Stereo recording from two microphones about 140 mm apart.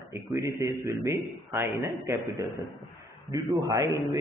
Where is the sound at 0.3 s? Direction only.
20° right (ahead or behind).